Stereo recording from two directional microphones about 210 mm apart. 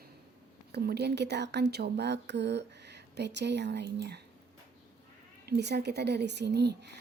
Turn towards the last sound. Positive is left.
turn(degrees=-55)  # may be behind; listen again after turning